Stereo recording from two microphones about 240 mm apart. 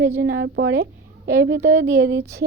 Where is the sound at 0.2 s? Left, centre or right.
Right.